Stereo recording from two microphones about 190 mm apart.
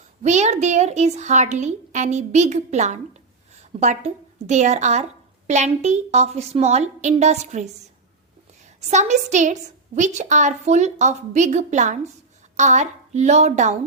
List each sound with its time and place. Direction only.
0.2 s a woman's voice: 35° right (ahead or behind)
8.9 s a woman's voice: 40° right (ahead or behind)